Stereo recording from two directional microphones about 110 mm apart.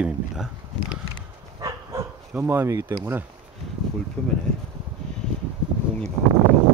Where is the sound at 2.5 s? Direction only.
25° right (ahead or behind).